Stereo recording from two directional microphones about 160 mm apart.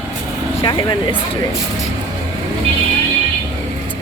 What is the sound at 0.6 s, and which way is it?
Speech, 30° left (ahead or behind).